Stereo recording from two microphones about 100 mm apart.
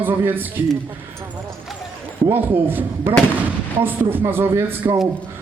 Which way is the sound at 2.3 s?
20° right (ahead or behind).